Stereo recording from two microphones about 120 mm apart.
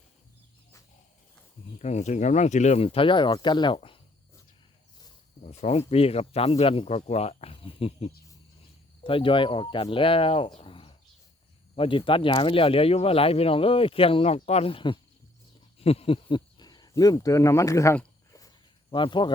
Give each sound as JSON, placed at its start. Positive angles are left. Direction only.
{"t": 1.8, "sound": "speech", "side_deg": 70}
{"t": 5.5, "sound": "speech", "side_deg": 70}
{"t": 5.9, "sound": "speech", "side_deg": 55}
{"t": 6.8, "sound": "speech", "side_deg": 65}
{"t": 9.0, "sound": "speech", "side_deg": 45}
{"t": 10.6, "sound": "a sound", "side_deg": 45}
{"t": 11.8, "sound": "speech", "side_deg": 45}
{"t": 18.3, "sound": "walk", "side_deg": 30}
{"t": 18.9, "sound": "speech", "side_deg": 40}